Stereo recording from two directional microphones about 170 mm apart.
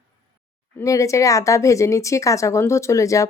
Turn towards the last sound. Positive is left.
turn(degrees=20)  # may be behind; listen again after turning